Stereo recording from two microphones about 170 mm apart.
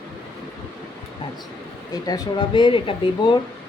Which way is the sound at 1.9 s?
25° left (ahead or behind).